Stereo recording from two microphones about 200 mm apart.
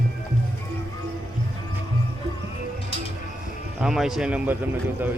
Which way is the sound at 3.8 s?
Centre (ahead or behind).